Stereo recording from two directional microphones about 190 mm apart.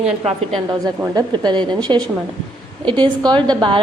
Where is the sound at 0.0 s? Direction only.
35° right (ahead or behind).